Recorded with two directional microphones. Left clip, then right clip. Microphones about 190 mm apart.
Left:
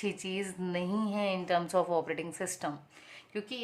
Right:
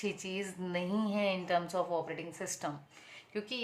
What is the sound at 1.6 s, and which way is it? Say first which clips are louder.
A woman's voice: left 4 dB; 35° left (ahead or behind).